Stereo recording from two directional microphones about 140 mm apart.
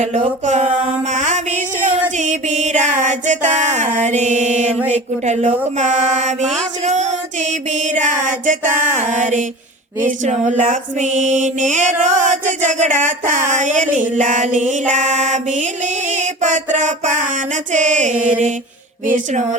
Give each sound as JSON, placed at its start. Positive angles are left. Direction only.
{"t": 0.0, "sound": "mantra", "side_deg": -55}
{"t": 1.1, "sound": "a sound", "side_deg": -60}
{"t": 2.1, "sound": "music", "side_deg": -60}
{"t": 5.2, "sound": "mantra", "side_deg": -55}